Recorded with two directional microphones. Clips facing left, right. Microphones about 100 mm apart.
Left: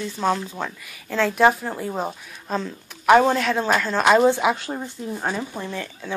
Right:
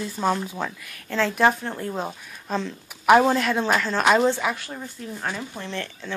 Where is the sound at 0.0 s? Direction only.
5° right (ahead or behind).